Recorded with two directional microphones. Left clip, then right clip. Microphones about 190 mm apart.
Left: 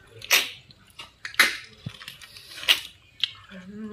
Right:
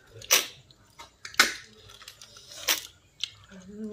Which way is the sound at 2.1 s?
60° right (ahead or behind).